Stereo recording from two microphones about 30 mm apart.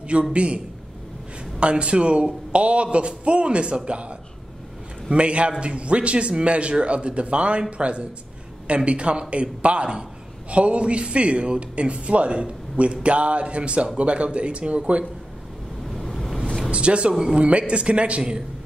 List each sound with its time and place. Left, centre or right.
0.3 s a man's voice: right
1.6 s a man's voice: right
5.1 s a man's voice: right
16.0 s ocean: centre
16.7 s a man's voice: right